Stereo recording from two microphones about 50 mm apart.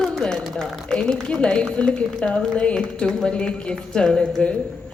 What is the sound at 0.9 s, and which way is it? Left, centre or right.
A woman's voice, centre.